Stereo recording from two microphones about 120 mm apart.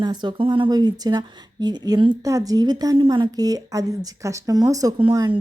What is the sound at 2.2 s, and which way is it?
A woman's voice, 30° right (ahead or behind).